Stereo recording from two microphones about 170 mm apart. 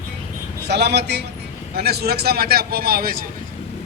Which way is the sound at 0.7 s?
75° right (ahead or behind).